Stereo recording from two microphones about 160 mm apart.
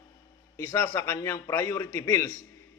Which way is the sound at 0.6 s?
15° left (ahead or behind).